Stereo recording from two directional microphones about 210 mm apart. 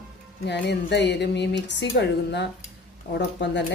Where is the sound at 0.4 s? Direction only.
55° left (ahead or behind).